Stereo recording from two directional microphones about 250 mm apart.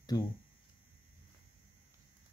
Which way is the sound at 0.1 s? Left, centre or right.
Centre.